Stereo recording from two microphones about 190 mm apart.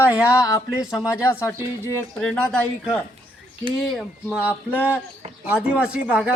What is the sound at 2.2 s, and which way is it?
Speech, 5° left (ahead or behind).